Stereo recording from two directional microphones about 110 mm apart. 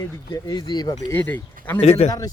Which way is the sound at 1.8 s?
75° left (ahead or behind).